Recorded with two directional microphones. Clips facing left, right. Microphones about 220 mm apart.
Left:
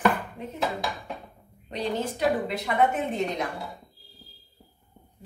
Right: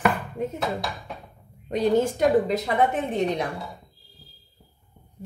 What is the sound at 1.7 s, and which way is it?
A woman's voice, 45° right (ahead or behind).